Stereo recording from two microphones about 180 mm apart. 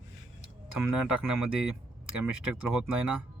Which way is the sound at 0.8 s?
5° right (ahead or behind).